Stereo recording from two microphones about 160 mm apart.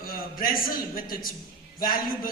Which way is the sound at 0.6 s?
65° left (ahead or behind).